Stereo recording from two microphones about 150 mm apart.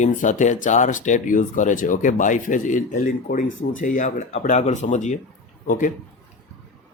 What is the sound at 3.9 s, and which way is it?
Speech, 50° left (ahead or behind).